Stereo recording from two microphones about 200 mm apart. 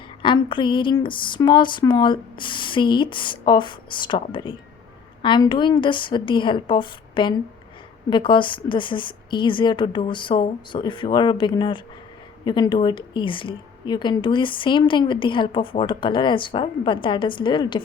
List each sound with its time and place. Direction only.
0.2 s speech: 25° left (ahead or behind)